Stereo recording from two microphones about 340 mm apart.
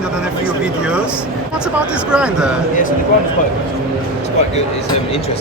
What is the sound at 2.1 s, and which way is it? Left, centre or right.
Speech, centre.